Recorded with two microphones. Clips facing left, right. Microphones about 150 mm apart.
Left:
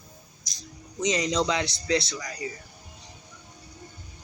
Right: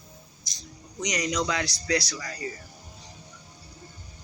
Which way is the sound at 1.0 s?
25° left (ahead or behind).